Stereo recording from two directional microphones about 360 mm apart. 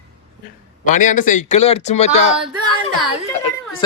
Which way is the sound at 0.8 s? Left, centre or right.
Left.